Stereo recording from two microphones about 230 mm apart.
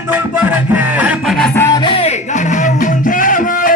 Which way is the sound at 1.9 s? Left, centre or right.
Left.